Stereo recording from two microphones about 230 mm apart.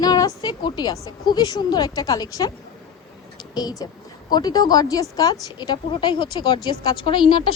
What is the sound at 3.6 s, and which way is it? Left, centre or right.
A woman's voice, centre.